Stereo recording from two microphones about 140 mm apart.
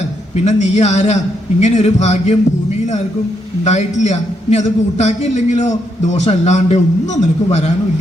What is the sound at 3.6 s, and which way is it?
A man's voice, 55° left (ahead or behind).